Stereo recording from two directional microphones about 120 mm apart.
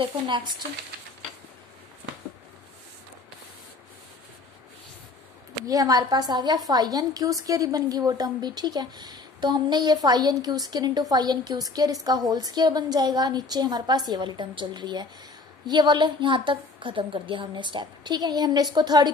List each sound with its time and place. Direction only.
5.7 s a woman's voice: 30° right (ahead or behind)